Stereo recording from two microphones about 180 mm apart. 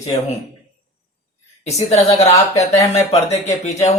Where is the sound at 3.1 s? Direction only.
40° left (ahead or behind).